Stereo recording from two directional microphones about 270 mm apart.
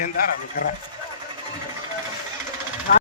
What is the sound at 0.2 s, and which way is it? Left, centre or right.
Speech, left.